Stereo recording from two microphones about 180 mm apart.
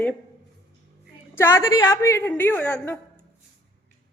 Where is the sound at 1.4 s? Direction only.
15° left (ahead or behind).